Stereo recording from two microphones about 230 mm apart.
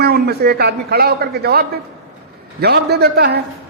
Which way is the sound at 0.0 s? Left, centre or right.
Right.